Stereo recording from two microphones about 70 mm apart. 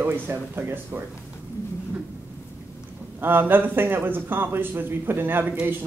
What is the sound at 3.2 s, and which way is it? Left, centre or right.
Speech, right.